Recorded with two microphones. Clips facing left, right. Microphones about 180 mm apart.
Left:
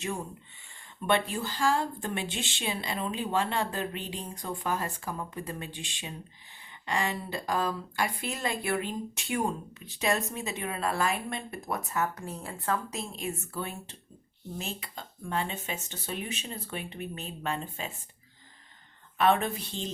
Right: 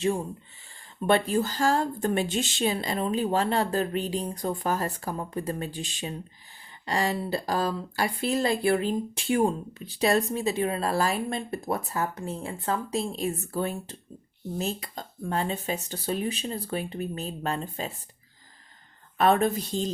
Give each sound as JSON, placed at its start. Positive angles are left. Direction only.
{"t": 1.0, "sound": "speech", "side_deg": -40}
{"t": 19.1, "sound": "speech", "side_deg": -40}